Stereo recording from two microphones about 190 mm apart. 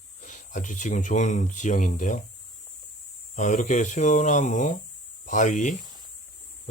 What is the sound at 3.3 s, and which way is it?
Speech, 40° left (ahead or behind).